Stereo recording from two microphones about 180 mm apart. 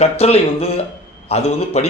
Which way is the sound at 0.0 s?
35° left (ahead or behind).